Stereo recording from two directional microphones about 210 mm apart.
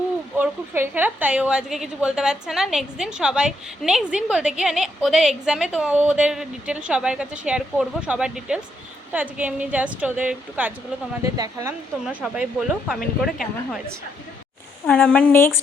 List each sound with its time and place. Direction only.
0.3 s a woman's voice: 10° right (ahead or behind)
11.3 s a woman's voice: 15° right (ahead or behind)
12.0 s a woman's voice: 5° right (ahead or behind)
14.8 s a woman's voice: 5° left (ahead or behind)